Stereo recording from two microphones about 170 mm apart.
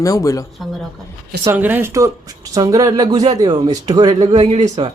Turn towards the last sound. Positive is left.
turn(degrees=-30)  # may be behind; listen again after turning